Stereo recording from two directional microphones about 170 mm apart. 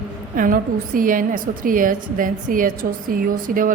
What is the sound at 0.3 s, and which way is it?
A woman's voice, 55° right (ahead or behind).